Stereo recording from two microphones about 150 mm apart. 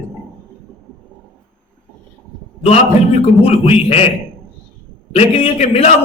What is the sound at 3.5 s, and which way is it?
Speech, 45° left (ahead or behind).